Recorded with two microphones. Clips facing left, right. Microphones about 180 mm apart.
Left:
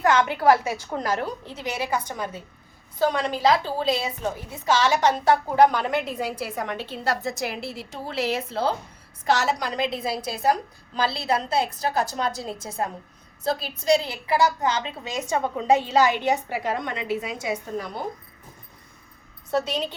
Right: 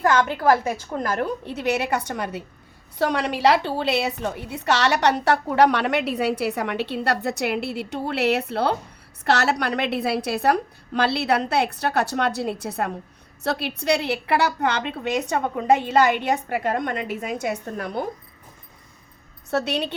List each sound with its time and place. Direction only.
0.6 s a woman's voice: 50° right (ahead or behind)
19.5 s a woman's voice: 70° right (ahead or behind)